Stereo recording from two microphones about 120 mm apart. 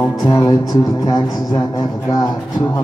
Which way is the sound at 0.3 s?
30° left (ahead or behind).